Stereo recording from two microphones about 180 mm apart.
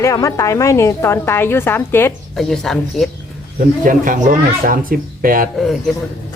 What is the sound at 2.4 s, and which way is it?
Speech, centre (ahead or behind).